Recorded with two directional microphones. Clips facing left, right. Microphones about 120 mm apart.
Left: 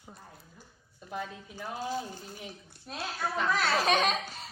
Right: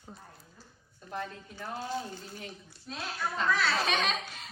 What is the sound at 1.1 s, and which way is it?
Speech, 10° left (ahead or behind).